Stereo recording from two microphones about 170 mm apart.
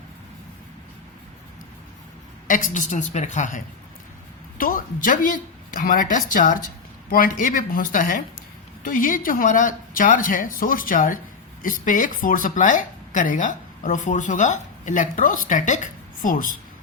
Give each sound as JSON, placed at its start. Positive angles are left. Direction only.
{"t": 2.5, "sound": "speech", "side_deg": 50}